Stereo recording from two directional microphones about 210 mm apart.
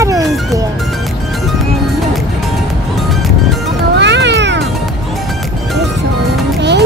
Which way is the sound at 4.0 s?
55° right (ahead or behind).